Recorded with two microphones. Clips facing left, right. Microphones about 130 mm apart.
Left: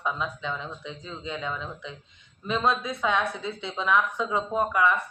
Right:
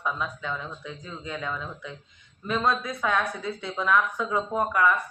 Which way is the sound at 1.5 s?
20° left (ahead or behind).